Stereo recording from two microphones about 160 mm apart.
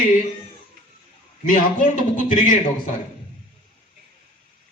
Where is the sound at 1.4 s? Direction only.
55° left (ahead or behind).